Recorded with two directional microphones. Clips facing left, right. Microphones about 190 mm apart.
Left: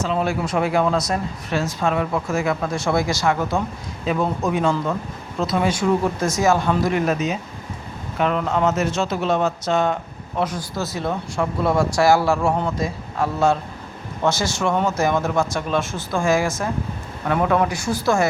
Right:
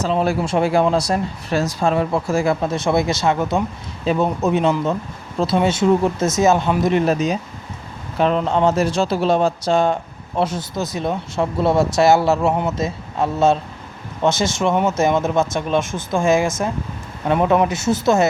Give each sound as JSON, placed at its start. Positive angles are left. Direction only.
{"t": 0.0, "sound": "speech", "side_deg": -35}